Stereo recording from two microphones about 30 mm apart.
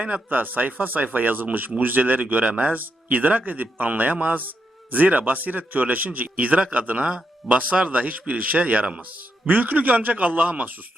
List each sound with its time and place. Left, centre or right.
0.3 s speech: right
2.4 s a man's voice: right
6.6 s speech: right
7.4 s a man's voice: right
8.5 s speech: right
9.5 s a man's voice: right